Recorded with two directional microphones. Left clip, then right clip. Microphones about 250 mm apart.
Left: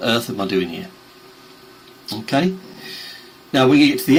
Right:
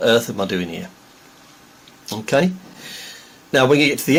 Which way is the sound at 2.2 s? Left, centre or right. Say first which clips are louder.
Right 2 dB; right.